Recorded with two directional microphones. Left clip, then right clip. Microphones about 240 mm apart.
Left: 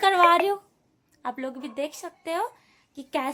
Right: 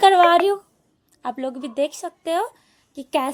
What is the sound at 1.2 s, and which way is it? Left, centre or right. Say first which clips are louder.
A woman's voice: right 5 dB; centre.